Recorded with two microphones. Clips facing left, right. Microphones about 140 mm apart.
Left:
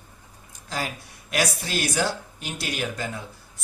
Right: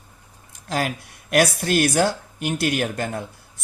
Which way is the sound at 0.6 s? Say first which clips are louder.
Right 6 dB; 65° right (ahead or behind).